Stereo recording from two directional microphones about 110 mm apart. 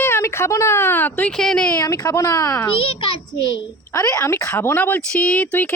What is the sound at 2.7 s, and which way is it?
Speech, 55° left (ahead or behind).